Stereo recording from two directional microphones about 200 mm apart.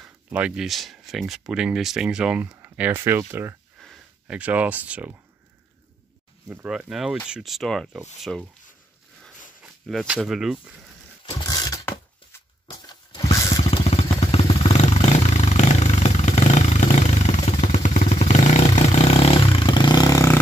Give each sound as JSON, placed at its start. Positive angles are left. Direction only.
{"t": 0.0, "sound": "speech", "side_deg": -5}
{"t": 6.5, "sound": "speech", "side_deg": -5}
{"t": 9.8, "sound": "speech", "side_deg": 0}
{"t": 11.2, "sound": "a sound", "side_deg": 20}
{"t": 13.7, "sound": "vehicle", "side_deg": 30}